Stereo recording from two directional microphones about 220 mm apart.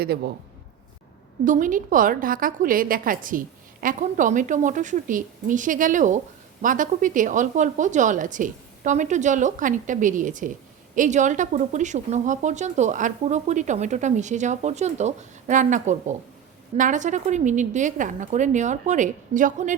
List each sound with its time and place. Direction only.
1.5 s speech: 35° right (ahead or behind)